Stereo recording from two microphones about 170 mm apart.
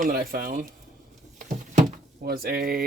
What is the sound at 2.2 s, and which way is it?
Speech, 60° right (ahead or behind).